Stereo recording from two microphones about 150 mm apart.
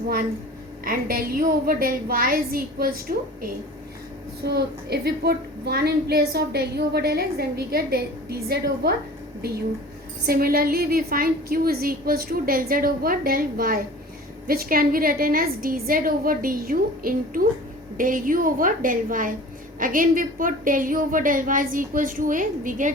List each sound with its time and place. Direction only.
0.9 s a woman's voice: 75° right (ahead or behind)
4.4 s a woman's voice: 90° right
10.2 s a woman's voice: 80° right; by 22.9 s 60° right (ahead or behind)